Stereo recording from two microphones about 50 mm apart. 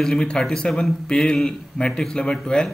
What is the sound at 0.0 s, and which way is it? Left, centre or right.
Speech, centre.